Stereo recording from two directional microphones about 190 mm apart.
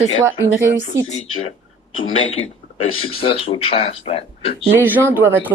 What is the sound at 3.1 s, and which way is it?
Speech, 30° left (ahead or behind).